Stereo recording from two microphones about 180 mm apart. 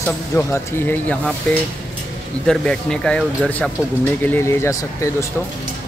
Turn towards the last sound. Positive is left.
turn(degrees=15)  # may be behind; listen again after turning